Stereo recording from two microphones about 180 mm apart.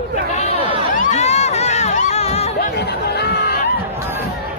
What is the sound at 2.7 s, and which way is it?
Chatter, 65° left (ahead or behind).